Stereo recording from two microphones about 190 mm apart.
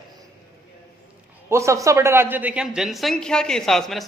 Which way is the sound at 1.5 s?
15° right (ahead or behind).